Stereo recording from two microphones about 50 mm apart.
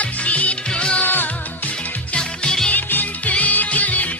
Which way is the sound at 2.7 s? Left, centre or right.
Left.